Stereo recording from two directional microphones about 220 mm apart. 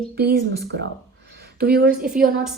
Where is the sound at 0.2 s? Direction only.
45° right (ahead or behind).